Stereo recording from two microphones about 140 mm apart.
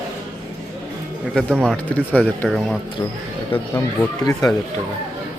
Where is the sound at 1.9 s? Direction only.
10° left (ahead or behind).